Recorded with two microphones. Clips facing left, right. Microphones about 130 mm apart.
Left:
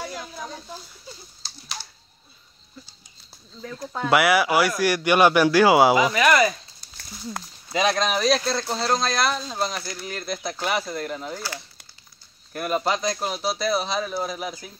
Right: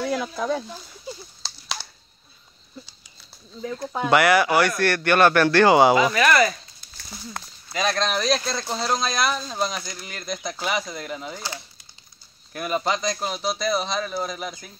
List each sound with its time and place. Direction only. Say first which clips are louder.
0.0 s speech: right 8 dB; 80° right
1.4 s a sound: right 1 dB; 90° right
4.1 s speech: right 1 dB; 5° left (ahead or behind)
6.1 s speech: even; 15° left (ahead or behind)
7.7 s speech: left 2 dB; 15° left (ahead or behind); by 11.4 s centre (ahead or behind)
12.5 s speech: left 1 dB; centre (ahead or behind)